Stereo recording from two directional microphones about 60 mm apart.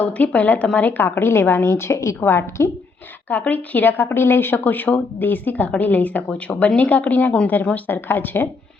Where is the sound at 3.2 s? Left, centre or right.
Left.